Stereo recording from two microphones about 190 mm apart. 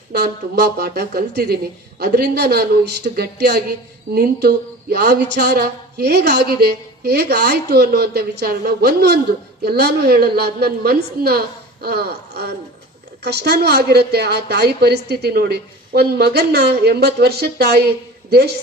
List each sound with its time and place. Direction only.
0.1 s a woman's voice: 55° right (ahead or behind)